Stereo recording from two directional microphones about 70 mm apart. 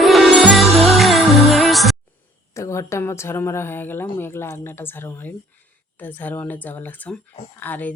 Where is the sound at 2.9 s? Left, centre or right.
Left.